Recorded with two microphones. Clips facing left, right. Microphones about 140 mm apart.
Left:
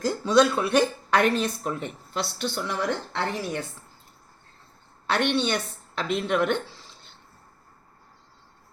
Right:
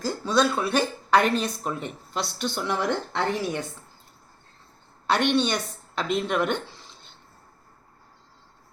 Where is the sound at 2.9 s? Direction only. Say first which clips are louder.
Right 2 dB; 20° right (ahead or behind).